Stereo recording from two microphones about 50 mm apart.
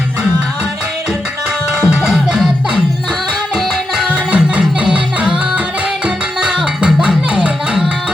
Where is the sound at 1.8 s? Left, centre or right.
Centre.